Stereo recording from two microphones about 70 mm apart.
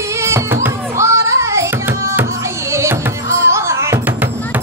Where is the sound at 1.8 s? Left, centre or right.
Right.